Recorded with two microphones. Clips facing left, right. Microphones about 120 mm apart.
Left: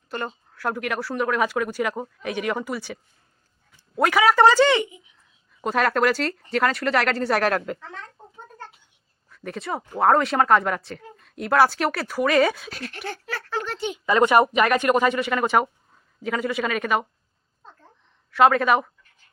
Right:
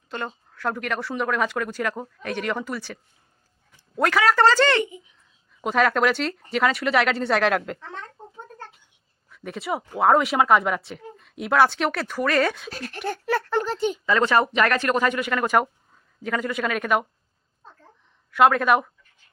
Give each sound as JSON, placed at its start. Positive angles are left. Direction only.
{"t": 0.1, "sound": "speech", "side_deg": 5}
{"t": 5.6, "sound": "speech", "side_deg": 0}
{"t": 9.3, "sound": "speech", "side_deg": 0}
{"t": 13.7, "sound": "speech", "side_deg": -40}
{"t": 14.0, "sound": "speech", "side_deg": 20}
{"t": 14.5, "sound": "speech", "side_deg": 5}
{"t": 18.3, "sound": "speech", "side_deg": 0}